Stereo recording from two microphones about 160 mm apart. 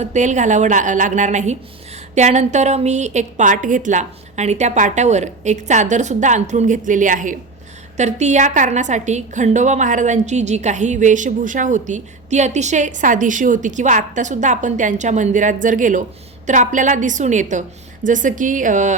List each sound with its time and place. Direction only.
0.0 s a woman's voice: 50° right (ahead or behind)